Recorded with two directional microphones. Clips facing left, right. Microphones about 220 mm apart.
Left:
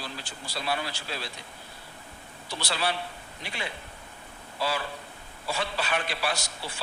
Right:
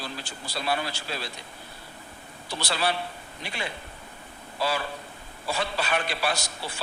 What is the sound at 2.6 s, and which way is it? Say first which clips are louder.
Speech: right 2 dB; 40° right (ahead or behind).